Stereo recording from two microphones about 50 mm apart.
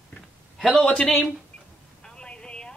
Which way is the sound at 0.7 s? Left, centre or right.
Centre.